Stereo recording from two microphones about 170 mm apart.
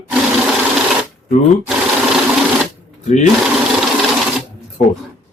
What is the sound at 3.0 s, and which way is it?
Speech, 45° left (ahead or behind).